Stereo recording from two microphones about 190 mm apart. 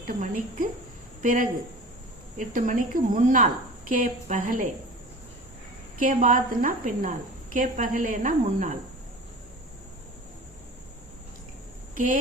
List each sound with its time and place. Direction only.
0.1 s a woman's voice: 45° right (ahead or behind)
6.0 s a woman's voice: 45° right (ahead or behind)
11.9 s a woman's voice: 45° right (ahead or behind)